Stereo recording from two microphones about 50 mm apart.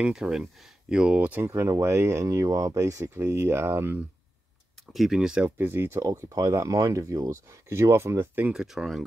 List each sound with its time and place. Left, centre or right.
0.1 s speech: centre
1.1 s speech: right
1.4 s speech: right
1.7 s speech: right
3.2 s speech: right
4.9 s speech: centre
5.6 s speech: right
6.2 s speech: right
8.5 s speech: centre